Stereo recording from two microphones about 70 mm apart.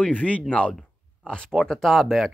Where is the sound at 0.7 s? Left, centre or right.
Centre.